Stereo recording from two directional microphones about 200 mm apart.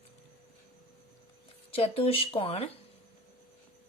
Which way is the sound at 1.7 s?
30° left (ahead or behind).